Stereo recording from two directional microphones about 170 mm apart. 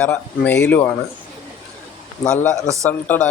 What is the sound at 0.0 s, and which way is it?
Speech, 5° left (ahead or behind).